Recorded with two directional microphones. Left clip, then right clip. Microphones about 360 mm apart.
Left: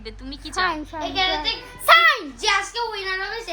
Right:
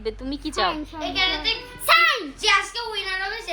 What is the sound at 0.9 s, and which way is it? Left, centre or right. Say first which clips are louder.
Speech: left 1 dB; centre.